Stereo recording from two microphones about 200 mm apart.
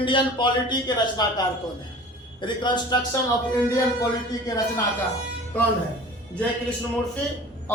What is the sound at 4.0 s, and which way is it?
A man's voice, 20° left (ahead or behind).